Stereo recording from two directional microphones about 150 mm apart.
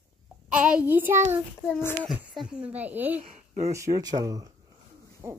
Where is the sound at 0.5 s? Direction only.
5° right (ahead or behind).